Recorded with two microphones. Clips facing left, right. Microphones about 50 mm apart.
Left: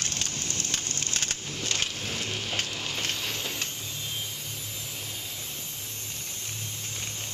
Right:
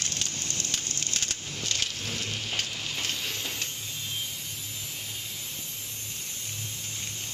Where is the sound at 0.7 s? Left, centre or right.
Left.